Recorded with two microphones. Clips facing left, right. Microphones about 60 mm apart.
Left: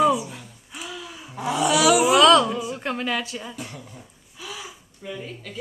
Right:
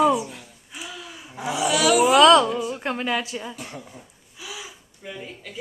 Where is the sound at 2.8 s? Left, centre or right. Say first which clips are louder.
Right 1 dB; centre.